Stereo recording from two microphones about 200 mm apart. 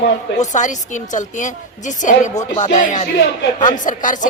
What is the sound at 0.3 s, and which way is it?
Speech, 35° left (ahead or behind).